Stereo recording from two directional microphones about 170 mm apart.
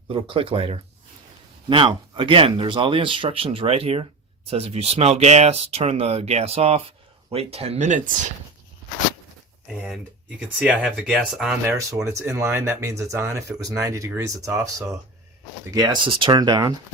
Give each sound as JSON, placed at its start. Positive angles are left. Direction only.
{"t": 0.1, "sound": "speech", "side_deg": -30}
{"t": 9.7, "sound": "speech", "side_deg": -5}
{"t": 11.6, "sound": "speech", "side_deg": -15}